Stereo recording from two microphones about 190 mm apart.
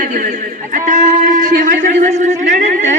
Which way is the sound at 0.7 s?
40° right (ahead or behind).